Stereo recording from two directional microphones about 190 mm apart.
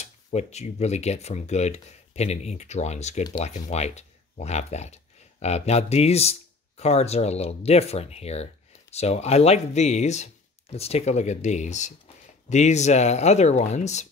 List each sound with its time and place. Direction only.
0.0 s speech: 35° left (ahead or behind)